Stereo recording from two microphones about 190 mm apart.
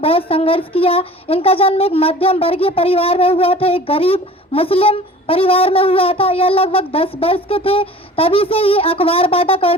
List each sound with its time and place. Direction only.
0.0 s speech: 30° left (ahead or behind)